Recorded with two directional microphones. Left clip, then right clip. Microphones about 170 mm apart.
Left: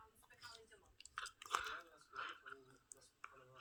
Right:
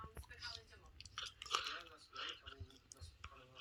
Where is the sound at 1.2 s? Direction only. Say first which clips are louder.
Right 1 dB; 25° left (ahead or behind).